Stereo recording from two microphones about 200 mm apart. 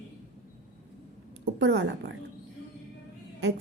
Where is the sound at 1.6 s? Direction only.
60° right (ahead or behind).